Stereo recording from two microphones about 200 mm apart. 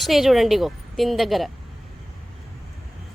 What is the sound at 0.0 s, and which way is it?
A woman's voice, centre (ahead or behind).